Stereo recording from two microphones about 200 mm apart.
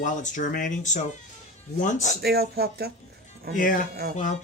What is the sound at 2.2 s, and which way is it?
Speech, 50° right (ahead or behind).